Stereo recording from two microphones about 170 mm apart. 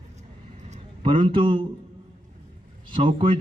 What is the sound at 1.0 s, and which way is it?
Speech, 30° right (ahead or behind).